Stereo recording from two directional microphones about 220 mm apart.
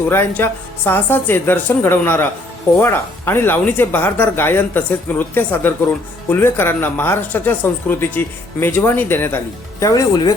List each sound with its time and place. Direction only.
0.1 s speech: 10° left (ahead or behind)